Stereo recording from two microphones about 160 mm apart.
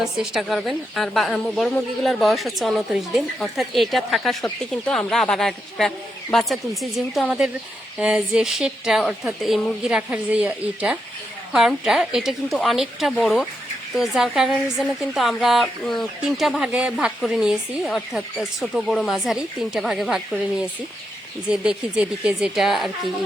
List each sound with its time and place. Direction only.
0.0 s speech: centre (ahead or behind)